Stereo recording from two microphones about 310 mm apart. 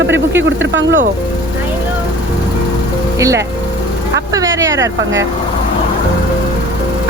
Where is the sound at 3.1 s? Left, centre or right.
Centre.